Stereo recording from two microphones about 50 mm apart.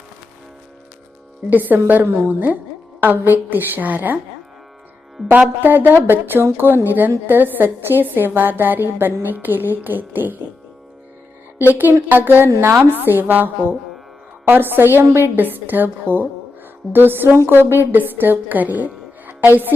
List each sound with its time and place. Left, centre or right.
1.5 s a woman's voice: right
5.2 s speech: centre
5.6 s a woman's voice: right
11.7 s a woman's voice: right